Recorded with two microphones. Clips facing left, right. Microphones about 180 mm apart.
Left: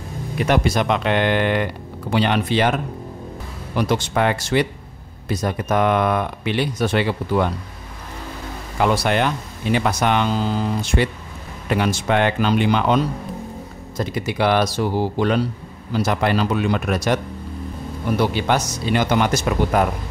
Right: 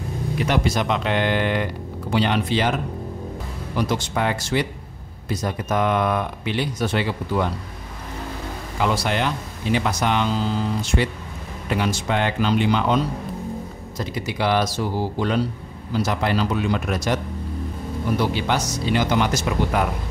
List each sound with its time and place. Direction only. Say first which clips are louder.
0.5 s speech: left 4 dB; 60° left (ahead or behind)
3.7 s speech: left 3 dB; 65° left (ahead or behind)
8.7 s speech: left 4 dB; 55° left (ahead or behind)
18.2 s speech: left 5 dB; 55° left (ahead or behind)